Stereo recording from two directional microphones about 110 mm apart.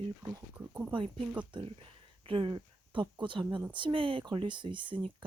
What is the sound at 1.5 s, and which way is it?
Speech, 55° right (ahead or behind).